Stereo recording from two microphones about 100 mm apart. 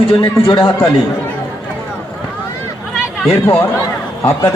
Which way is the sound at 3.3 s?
25° left (ahead or behind).